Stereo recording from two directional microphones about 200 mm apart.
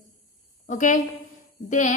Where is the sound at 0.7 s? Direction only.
40° left (ahead or behind).